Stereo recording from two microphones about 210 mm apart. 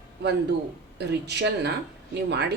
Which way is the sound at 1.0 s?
55° right (ahead or behind).